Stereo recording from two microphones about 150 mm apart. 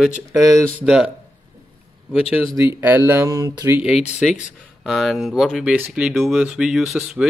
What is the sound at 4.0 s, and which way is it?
Speech, 50° left (ahead or behind).